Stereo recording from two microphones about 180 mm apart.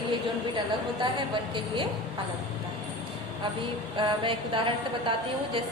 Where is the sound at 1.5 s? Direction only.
25° right (ahead or behind).